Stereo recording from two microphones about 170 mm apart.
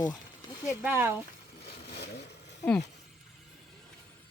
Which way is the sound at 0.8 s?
10° right (ahead or behind).